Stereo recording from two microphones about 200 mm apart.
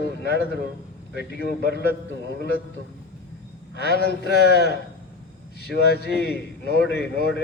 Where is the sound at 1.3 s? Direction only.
55° left (ahead or behind).